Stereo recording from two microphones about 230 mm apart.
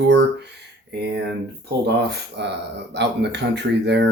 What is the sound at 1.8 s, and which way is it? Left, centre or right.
Speech, right.